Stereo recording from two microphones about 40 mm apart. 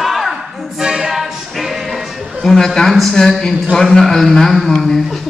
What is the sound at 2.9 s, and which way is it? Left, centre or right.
A man's voice, centre.